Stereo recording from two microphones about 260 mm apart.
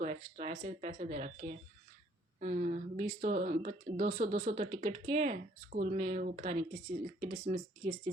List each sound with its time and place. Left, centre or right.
0.0 s speech: right